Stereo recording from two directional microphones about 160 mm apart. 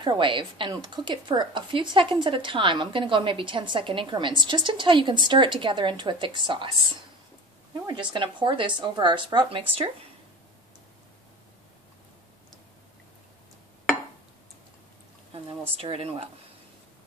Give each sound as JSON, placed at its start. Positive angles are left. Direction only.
{"t": 0.0, "sound": "speech", "side_deg": -30}
{"t": 7.8, "sound": "speech", "side_deg": -30}
{"t": 15.7, "sound": "speech", "side_deg": -35}